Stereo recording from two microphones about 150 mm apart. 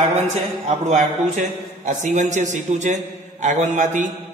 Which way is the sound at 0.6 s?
55° right (ahead or behind).